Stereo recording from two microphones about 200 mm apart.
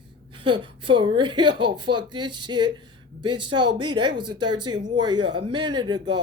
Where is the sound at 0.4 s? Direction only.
25° right (ahead or behind).